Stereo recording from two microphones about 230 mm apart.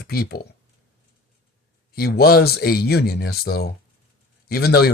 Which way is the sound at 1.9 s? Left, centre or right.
Left.